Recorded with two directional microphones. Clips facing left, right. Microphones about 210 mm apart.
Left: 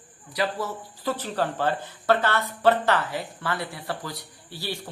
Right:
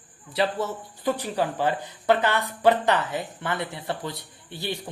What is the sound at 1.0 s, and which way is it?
Speech, 15° right (ahead or behind).